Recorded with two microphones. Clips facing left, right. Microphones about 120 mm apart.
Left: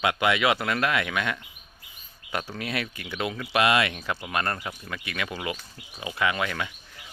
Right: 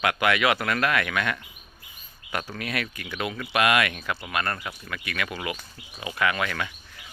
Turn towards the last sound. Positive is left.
turn(degrees=20)  # may be behind; listen again after turning